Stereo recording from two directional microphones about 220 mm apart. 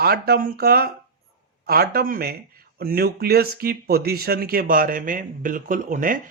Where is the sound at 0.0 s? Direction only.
45° right (ahead or behind).